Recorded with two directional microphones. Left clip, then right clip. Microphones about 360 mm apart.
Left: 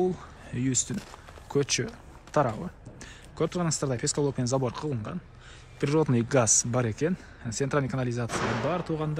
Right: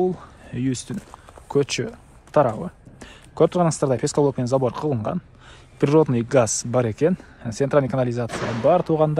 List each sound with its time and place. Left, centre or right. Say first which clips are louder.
0.0 s speech: right 5 dB; centre
8.3 s speech: right 2 dB; right
8.6 s speech: right 13 dB; centre